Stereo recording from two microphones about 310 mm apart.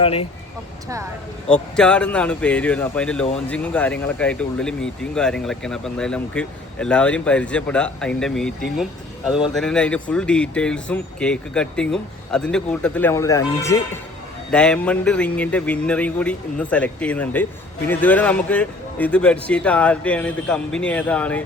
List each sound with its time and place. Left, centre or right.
0.0 s speech: centre
1.7 s speech: centre